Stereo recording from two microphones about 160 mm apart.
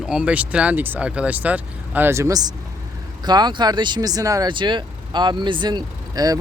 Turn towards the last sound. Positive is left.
turn(degrees=-25)  # may be behind; listen again after turning